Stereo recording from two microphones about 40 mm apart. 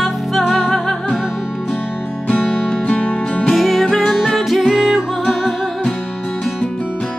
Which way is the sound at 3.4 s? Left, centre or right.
Centre.